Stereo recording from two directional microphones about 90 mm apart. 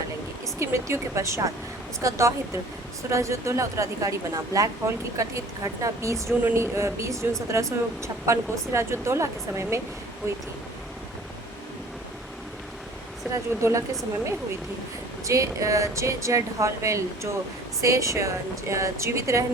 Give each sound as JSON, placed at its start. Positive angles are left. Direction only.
{"t": 0.6, "sound": "a woman's voice", "side_deg": -30}
{"t": 13.6, "sound": "a woman's voice", "side_deg": -30}
{"t": 15.2, "sound": "a woman's voice", "side_deg": -35}